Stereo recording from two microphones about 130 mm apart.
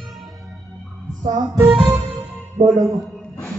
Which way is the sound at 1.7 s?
5° right (ahead or behind).